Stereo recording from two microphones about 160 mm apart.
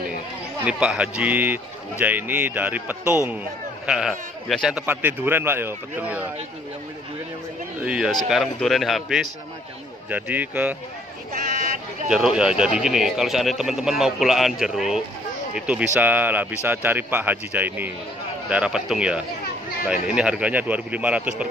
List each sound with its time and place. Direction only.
0.7 s speech: 5° right (ahead or behind)
7.8 s speech: 5° right (ahead or behind)
11.3 s a sound: 55° right (ahead or behind)
12.1 s speech: 5° right (ahead or behind)